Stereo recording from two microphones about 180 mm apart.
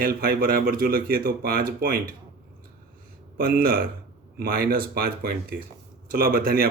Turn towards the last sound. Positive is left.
turn(degrees=-55)  # may be behind; listen again after turning